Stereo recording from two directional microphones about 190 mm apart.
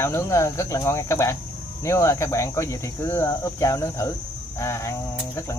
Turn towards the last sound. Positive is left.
turn(degrees=15)  # may be behind; listen again after turning